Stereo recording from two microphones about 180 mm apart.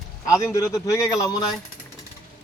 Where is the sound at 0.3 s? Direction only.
15° left (ahead or behind).